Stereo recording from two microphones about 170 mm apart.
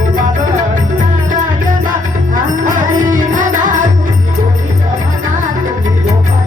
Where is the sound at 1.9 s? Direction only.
50° right (ahead or behind).